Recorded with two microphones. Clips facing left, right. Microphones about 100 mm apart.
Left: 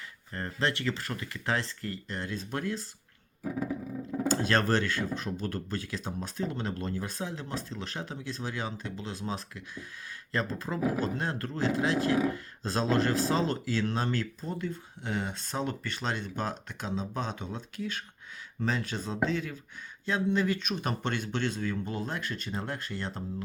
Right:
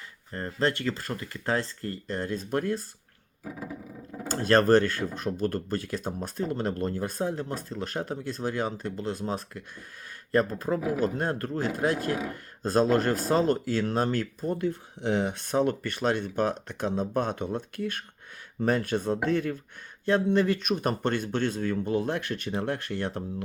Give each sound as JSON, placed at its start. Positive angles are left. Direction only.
{"t": 0.3, "sound": "speech", "side_deg": -35}
{"t": 4.3, "sound": "speech", "side_deg": -45}